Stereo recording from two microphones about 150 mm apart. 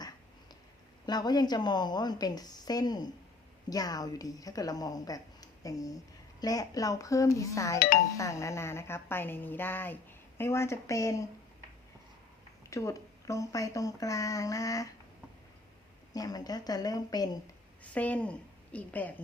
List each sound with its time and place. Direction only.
1.0 s a woman's voice: 30° left (ahead or behind)
12.7 s a woman's voice: 20° left (ahead or behind)
16.1 s a woman's voice: 25° left (ahead or behind)
17.9 s a woman's voice: 10° left (ahead or behind)